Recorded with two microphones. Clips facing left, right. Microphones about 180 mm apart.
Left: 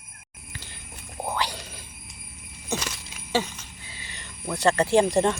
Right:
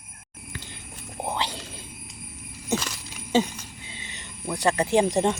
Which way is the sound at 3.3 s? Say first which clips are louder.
Right 4 dB; 15° right (ahead or behind).